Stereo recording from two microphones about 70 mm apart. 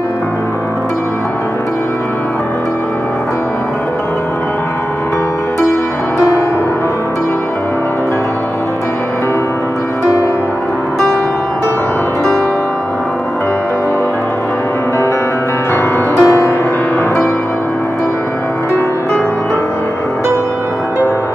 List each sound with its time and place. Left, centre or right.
6.1 s music: left
15.7 s music: left